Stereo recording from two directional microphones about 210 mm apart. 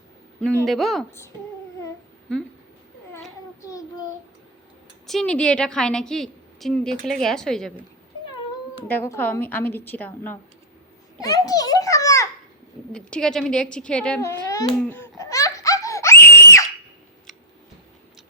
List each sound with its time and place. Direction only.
0.6 s a woman's voice: centre (ahead or behind)
3.6 s child singing: 15° left (ahead or behind)
5.0 s a woman's voice: 5° left (ahead or behind)
8.9 s a woman's voice: 10° left (ahead or behind)
11.2 s children playing: 15° left (ahead or behind)
12.9 s a woman's voice: 5° left (ahead or behind)
14.8 s laughter: 10° left (ahead or behind)